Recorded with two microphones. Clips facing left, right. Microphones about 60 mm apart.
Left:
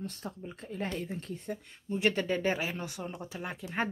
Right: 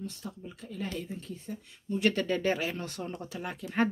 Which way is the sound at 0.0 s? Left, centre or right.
Left.